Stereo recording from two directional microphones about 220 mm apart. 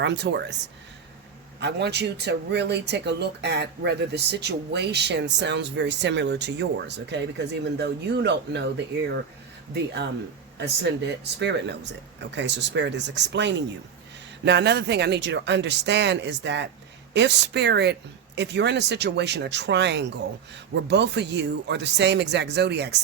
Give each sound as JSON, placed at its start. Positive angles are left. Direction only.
{"t": 0.0, "sound": "speech", "side_deg": -50}
{"t": 1.5, "sound": "speech", "side_deg": -50}
{"t": 9.7, "sound": "speech", "side_deg": -50}
{"t": 11.3, "sound": "speech", "side_deg": -50}